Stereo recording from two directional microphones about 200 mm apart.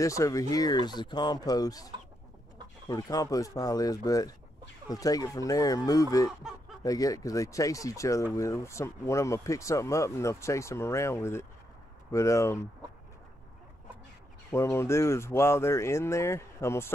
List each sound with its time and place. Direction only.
0.0 s speech: 15° left (ahead or behind)
2.9 s speech: 20° left (ahead or behind)
14.5 s speech: 15° left (ahead or behind)